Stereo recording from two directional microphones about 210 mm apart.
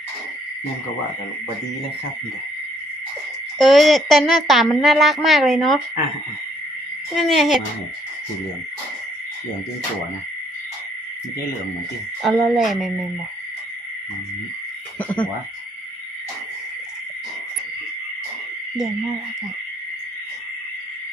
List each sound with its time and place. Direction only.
3.6 s a woman's voice: centre (ahead or behind)
7.1 s a woman's voice: centre (ahead or behind)
12.2 s a woman's voice: centre (ahead or behind)
14.9 s speech: 5° left (ahead or behind)